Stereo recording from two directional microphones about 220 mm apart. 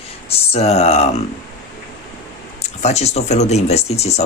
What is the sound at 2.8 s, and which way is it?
Speech, 30° left (ahead or behind).